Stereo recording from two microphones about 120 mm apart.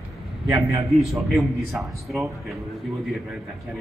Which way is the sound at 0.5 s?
25° right (ahead or behind).